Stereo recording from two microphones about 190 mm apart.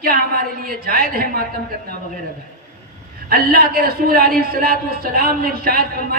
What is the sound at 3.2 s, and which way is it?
A man's voice, 55° right (ahead or behind).